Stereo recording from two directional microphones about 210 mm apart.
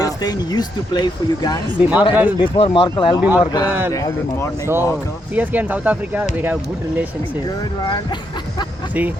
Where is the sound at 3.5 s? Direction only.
20° left (ahead or behind).